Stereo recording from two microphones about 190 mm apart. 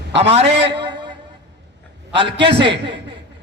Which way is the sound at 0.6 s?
25° right (ahead or behind).